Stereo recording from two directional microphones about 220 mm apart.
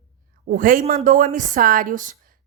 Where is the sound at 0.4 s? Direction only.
40° right (ahead or behind).